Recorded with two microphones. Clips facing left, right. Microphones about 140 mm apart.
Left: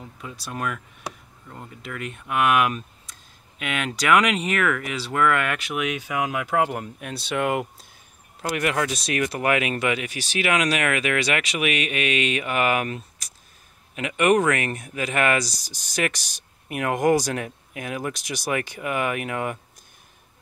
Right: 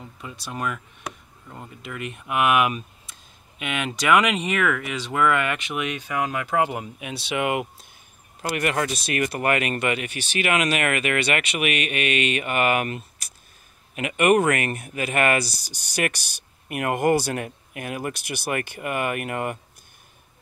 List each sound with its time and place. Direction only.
0.2 s speech: centre (ahead or behind)
15.4 s speech: 65° right (ahead or behind)
16.6 s speech: 5° right (ahead or behind)
18.1 s speech: 60° right (ahead or behind)
18.8 s speech: centre (ahead or behind)